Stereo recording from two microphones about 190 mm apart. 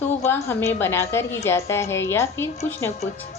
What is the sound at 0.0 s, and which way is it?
A woman's voice, 15° left (ahead or behind).